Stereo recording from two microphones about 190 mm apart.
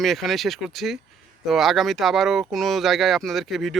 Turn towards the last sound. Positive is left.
turn(degrees=0)  # may be behind; listen again after turning